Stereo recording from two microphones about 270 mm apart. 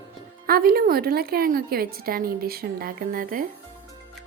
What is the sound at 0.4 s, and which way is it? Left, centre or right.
A woman's voice, right.